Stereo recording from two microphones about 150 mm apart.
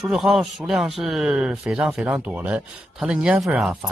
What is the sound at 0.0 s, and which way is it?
A man's voice, centre (ahead or behind).